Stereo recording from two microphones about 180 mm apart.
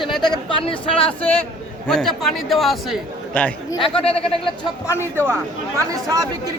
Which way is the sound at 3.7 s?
30° left (ahead or behind).